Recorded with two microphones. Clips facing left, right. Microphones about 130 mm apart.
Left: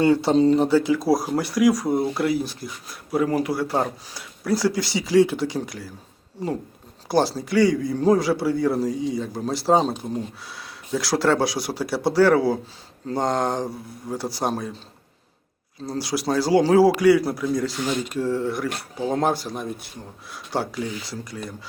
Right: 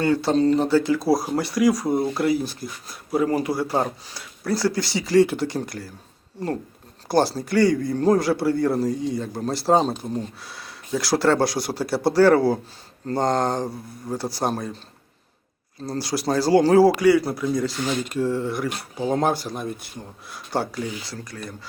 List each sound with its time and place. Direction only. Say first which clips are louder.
0.0 s speech: left 2 dB; 25° left (ahead or behind)
0.5 s speech: left 1 dB; 10° left (ahead or behind)
4.1 s speech: left 2 dB; 10° left (ahead or behind)
7.1 s speech: even; 5° left (ahead or behind)
15.9 s speech: even; 5° left (ahead or behind)